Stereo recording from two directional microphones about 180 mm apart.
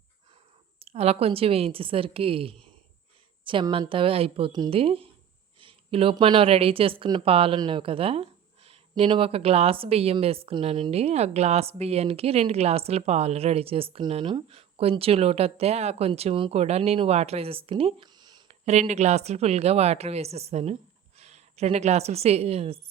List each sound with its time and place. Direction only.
0.8 s a woman's voice: 35° right (ahead or behind)
18.4 s a woman's voice: 40° right (ahead or behind)